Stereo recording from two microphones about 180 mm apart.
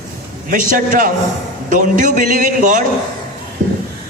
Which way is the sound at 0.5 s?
50° right (ahead or behind).